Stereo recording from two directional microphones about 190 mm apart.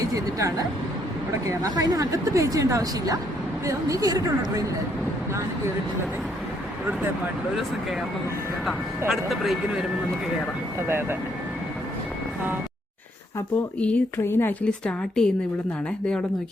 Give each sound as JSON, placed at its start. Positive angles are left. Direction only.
{"t": 0.1, "sound": "speech", "side_deg": -20}
{"t": 8.6, "sound": "a woman's voice", "side_deg": 0}
{"t": 10.8, "sound": "speech", "side_deg": -10}
{"t": 13.7, "sound": "a woman's voice", "side_deg": 10}